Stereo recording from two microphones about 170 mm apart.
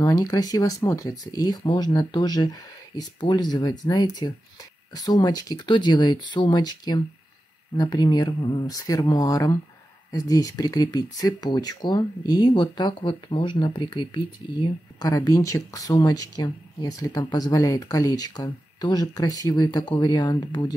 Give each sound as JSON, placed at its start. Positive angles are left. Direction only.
{"t": 0.0, "sound": "speech", "side_deg": 20}